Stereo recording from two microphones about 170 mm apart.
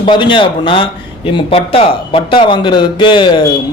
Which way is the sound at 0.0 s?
30° left (ahead or behind).